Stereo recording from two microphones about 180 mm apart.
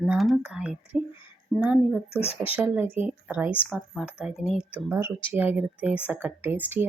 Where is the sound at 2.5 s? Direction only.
10° right (ahead or behind).